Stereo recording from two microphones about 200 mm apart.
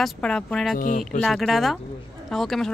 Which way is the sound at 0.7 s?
40° left (ahead or behind).